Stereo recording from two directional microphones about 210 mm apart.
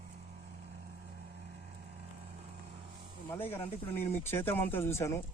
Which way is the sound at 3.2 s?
10° left (ahead or behind).